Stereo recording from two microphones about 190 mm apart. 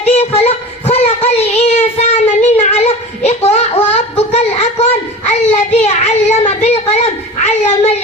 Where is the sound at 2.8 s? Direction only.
35° left (ahead or behind).